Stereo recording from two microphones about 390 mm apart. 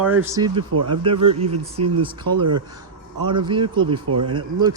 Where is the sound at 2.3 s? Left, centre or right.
Right.